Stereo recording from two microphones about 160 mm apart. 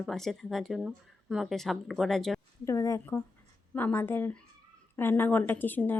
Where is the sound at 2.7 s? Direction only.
20° left (ahead or behind).